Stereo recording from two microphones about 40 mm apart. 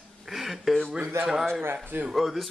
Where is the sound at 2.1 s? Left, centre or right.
Centre.